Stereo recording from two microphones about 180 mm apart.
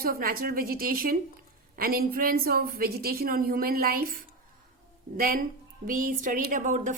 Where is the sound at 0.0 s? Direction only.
55° right (ahead or behind).